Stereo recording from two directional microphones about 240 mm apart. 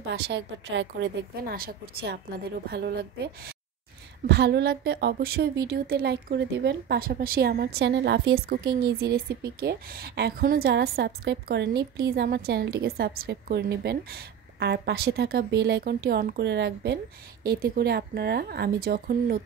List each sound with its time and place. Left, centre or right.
0.1 s a woman's voice: right